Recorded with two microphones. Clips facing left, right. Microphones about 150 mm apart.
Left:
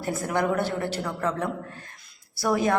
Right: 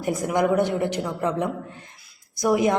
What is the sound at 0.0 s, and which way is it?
A woman's voice, 15° right (ahead or behind).